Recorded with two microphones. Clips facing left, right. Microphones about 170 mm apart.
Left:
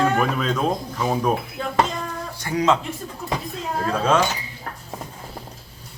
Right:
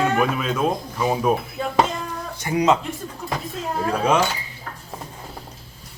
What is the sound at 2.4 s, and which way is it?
Speech, 20° right (ahead or behind).